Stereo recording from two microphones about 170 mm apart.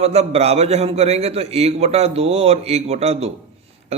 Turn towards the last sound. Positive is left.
turn(degrees=-40)  # may be behind; listen again after turning